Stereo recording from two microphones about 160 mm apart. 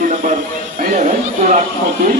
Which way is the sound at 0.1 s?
55° right (ahead or behind).